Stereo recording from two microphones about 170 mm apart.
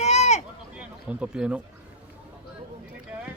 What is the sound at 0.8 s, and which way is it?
Speech, 5° right (ahead or behind).